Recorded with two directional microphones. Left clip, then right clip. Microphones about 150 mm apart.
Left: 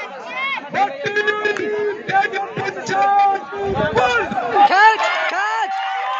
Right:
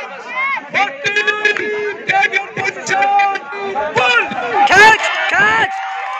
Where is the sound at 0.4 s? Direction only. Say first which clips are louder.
Right 3 dB; 65° left (ahead or behind); by 4.2 s 90° left.